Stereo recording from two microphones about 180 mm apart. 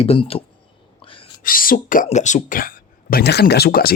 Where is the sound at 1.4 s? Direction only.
50° left (ahead or behind).